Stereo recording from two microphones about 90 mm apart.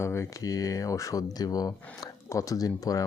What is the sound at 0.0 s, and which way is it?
Speech, 30° left (ahead or behind).